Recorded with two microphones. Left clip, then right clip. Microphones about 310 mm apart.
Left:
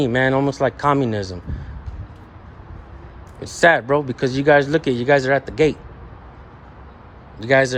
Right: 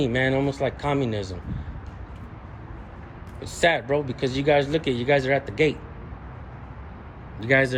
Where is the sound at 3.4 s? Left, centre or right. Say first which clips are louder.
Left 7 dB; left.